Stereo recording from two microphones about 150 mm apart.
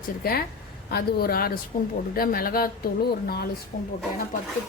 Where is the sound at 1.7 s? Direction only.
70° left (ahead or behind); by 3.4 s 90° left.